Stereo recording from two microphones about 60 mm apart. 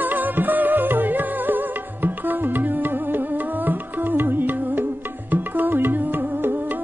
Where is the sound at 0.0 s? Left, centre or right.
Right.